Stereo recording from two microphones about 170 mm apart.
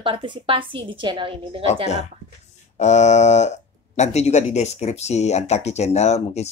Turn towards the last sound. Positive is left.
turn(degrees=40)  # may be behind; listen again after turning